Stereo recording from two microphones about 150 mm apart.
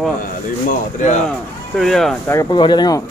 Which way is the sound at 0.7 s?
55° left (ahead or behind).